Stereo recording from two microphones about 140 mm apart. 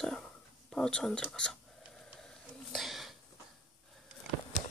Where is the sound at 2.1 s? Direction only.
Centre (ahead or behind).